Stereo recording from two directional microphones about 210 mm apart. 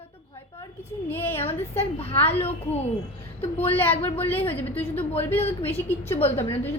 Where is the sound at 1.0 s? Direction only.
10° left (ahead or behind).